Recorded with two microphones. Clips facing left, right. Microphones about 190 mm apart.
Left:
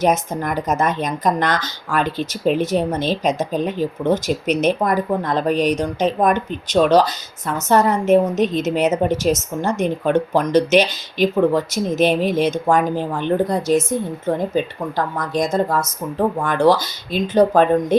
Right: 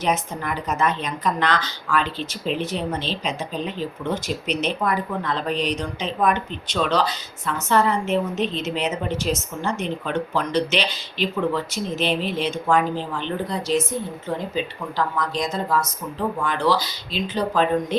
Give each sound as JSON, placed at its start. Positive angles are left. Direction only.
{"t": 0.0, "sound": "speech", "side_deg": 45}